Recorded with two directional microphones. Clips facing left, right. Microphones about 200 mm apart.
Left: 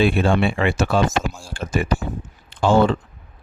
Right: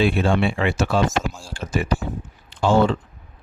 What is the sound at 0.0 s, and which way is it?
Speech, 55° left (ahead or behind).